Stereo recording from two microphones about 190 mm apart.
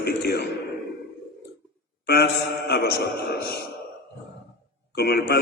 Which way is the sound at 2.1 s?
55° left (ahead or behind).